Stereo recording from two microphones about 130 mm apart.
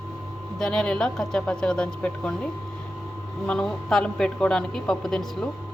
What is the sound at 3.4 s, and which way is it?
A man's voice, 10° left (ahead or behind).